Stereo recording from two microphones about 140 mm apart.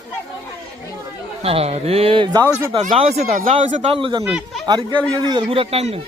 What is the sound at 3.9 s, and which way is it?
A man's voice, 35° right (ahead or behind).